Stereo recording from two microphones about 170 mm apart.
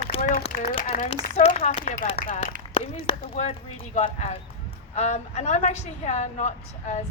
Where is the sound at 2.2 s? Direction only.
50° left (ahead or behind).